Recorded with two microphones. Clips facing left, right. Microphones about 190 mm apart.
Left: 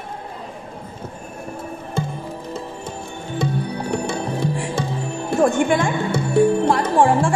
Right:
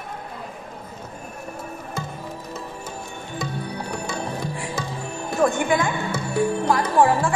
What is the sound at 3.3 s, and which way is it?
Music, 25° left (ahead or behind).